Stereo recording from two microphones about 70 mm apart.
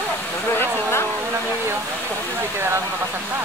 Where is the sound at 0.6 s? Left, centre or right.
Left.